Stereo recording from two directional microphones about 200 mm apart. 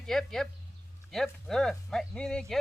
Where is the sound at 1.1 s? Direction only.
Centre (ahead or behind).